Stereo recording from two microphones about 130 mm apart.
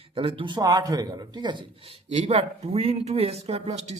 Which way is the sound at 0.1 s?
45° right (ahead or behind).